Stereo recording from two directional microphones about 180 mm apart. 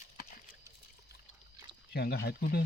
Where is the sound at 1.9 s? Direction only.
60° left (ahead or behind).